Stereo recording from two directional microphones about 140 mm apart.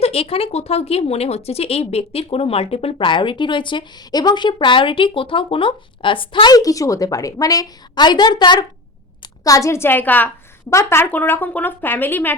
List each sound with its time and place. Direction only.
0.0 s a woman's voice: 45° left (ahead or behind); by 12.3 s 15° left (ahead or behind)